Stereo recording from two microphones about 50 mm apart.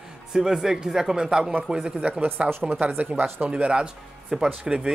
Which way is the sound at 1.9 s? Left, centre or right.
Right.